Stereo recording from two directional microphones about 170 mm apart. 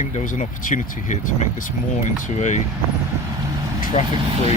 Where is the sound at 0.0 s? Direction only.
45° left (ahead or behind).